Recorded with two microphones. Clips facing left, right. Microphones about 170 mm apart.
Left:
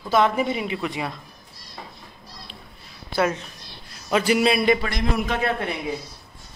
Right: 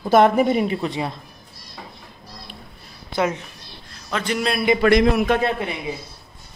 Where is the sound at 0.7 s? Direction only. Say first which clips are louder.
Right 3 dB; 30° right (ahead or behind).